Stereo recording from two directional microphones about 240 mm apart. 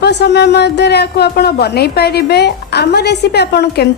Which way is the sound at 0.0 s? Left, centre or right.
Left.